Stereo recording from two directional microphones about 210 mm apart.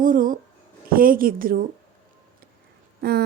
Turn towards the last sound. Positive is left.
turn(degrees=-50)  # may be behind; listen again after turning